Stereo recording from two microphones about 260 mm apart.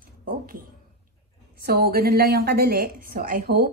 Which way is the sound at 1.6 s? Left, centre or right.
Right.